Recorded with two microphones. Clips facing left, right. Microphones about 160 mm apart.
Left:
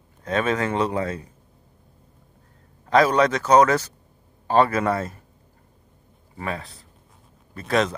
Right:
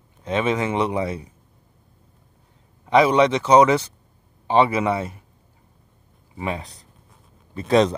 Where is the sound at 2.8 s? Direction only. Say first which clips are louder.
Right 2 dB; 10° right (ahead or behind).